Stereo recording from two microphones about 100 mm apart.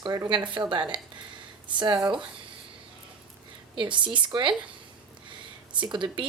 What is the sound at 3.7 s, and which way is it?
Speech, 55° right (ahead or behind).